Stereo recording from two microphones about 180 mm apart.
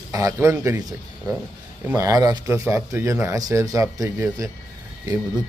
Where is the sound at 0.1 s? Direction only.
20° right (ahead or behind).